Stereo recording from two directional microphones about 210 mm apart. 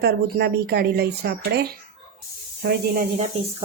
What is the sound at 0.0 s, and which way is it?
Speech, 50° right (ahead or behind).